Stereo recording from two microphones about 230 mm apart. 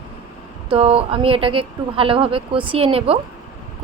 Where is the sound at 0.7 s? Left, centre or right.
Right.